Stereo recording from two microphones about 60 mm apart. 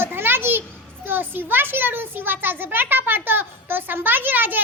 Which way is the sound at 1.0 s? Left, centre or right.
Right.